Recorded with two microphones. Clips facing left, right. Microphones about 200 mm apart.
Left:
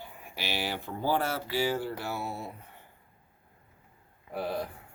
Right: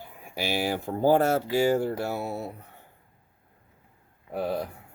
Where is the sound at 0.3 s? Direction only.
45° right (ahead or behind).